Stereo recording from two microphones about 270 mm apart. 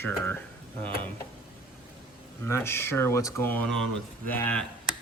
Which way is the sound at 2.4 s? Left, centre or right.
Centre.